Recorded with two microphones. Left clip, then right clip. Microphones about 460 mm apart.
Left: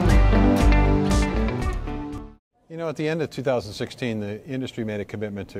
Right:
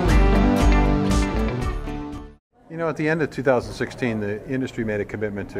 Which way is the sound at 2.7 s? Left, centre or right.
Left.